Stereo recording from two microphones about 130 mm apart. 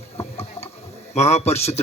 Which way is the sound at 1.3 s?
55° left (ahead or behind).